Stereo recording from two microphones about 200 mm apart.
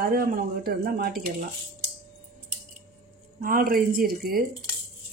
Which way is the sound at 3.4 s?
45° right (ahead or behind).